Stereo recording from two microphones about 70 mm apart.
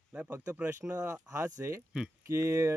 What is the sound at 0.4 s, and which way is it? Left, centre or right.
Speech, right.